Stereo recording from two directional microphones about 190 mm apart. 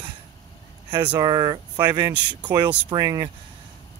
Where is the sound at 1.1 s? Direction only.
20° right (ahead or behind).